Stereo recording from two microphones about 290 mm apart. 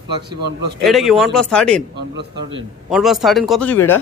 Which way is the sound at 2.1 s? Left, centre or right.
Right.